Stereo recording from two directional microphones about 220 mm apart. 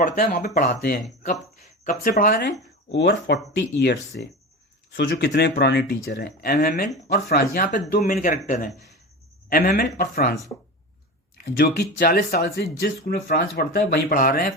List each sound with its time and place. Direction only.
0.0 s speech: 35° left (ahead or behind)
11.3 s speech: 45° left (ahead or behind)